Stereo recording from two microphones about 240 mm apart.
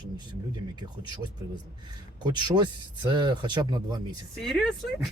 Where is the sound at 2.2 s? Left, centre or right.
Centre.